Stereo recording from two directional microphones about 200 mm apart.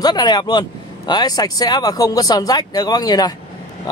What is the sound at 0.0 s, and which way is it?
Speech, 20° left (ahead or behind).